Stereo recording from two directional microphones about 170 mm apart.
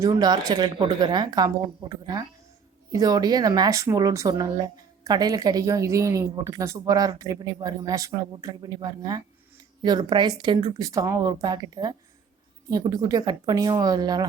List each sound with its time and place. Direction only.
0.0 s a woman's voice: 25° right (ahead or behind)